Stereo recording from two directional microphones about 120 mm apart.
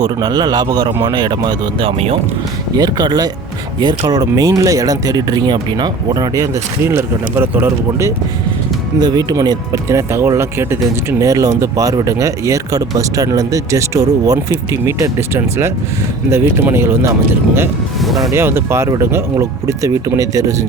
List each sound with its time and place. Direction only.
0.0 s speech: 35° right (ahead or behind); by 2.1 s 50° right (ahead or behind)
2.7 s speech: 35° right (ahead or behind); by 8.1 s 20° right (ahead or behind)
9.0 s speech: 35° right (ahead or behind)
18.0 s speech: centre (ahead or behind)
18.3 s speech: 20° right (ahead or behind)